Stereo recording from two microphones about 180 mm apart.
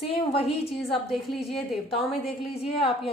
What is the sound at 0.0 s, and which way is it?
Speech, 30° left (ahead or behind).